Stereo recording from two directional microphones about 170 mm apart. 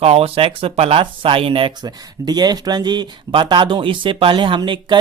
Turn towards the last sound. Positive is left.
turn(degrees=-25)  # may be behind; listen again after turning